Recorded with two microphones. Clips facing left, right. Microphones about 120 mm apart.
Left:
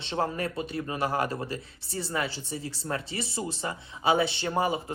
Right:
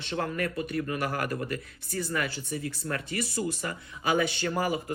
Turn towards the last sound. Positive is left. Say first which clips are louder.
# left 1 dB
turn(degrees=25)  # may be behind; listen again after turning